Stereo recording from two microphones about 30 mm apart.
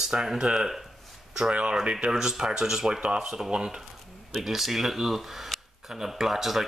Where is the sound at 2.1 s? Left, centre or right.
Centre.